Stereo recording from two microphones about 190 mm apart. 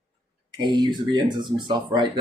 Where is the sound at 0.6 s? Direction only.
25° right (ahead or behind).